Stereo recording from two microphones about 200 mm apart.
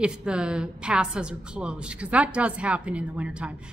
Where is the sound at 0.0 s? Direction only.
5° right (ahead or behind).